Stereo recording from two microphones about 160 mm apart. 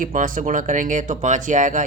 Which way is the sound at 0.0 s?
55° right (ahead or behind).